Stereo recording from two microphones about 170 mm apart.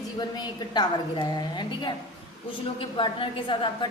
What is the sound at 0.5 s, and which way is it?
A woman's voice, 25° left (ahead or behind).